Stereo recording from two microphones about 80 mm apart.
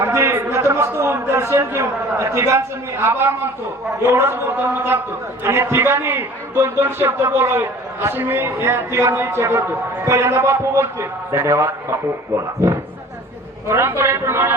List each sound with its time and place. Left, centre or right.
0.0 s a man's voice: right
13.7 s a man's voice: right